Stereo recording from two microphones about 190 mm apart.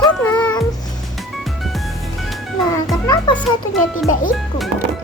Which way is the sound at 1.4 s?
Centre (ahead or behind).